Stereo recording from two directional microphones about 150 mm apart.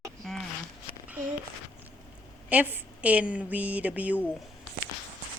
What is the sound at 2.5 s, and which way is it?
A woman's voice, 10° right (ahead or behind).